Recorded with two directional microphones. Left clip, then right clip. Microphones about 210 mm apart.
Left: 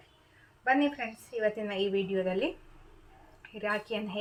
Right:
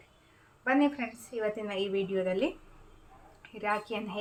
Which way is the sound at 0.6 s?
5° right (ahead or behind).